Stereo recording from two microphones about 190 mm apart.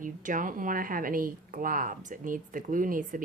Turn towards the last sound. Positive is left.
turn(degrees=-45)  # may be behind; listen again after turning